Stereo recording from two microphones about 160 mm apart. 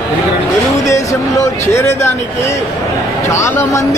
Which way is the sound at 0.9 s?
20° left (ahead or behind).